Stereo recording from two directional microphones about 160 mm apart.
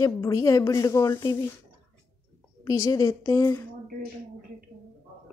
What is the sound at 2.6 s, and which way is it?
Speech, 20° left (ahead or behind).